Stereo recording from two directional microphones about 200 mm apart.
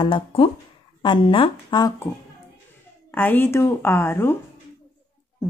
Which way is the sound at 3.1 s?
10° left (ahead or behind).